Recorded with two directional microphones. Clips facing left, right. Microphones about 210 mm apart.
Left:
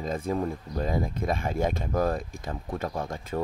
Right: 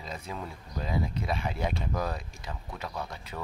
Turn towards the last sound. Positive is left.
turn(degrees=45)  # may be behind; listen again after turning